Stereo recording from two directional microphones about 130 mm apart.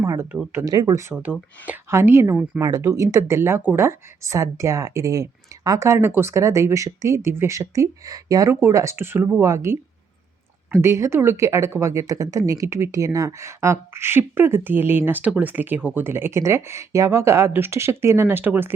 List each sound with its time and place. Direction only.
0.0 s speech: 25° right (ahead or behind)
1.1 s speech: 10° right (ahead or behind)